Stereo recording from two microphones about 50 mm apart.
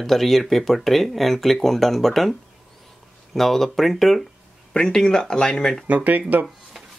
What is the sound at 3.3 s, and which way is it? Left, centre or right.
Speech, centre.